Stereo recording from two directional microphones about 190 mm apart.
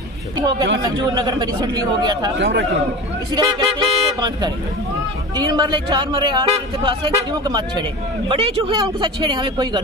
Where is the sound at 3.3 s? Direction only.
25° right (ahead or behind).